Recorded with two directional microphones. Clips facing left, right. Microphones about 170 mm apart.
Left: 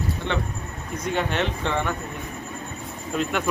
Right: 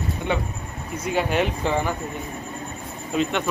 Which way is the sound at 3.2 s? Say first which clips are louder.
Right 2 dB; 5° left (ahead or behind).